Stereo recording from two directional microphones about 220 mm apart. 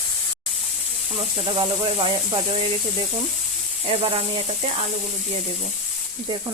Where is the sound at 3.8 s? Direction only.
25° right (ahead or behind).